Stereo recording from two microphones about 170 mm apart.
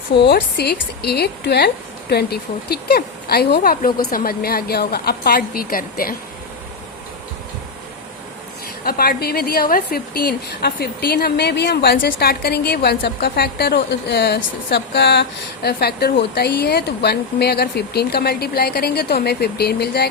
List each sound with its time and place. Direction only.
0.1 s a woman's voice: 85° left; by 6.1 s 60° left (ahead or behind)
8.8 s a woman's voice: 60° left (ahead or behind)